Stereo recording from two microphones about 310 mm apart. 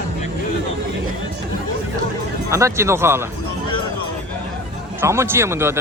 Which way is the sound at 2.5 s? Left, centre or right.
Centre.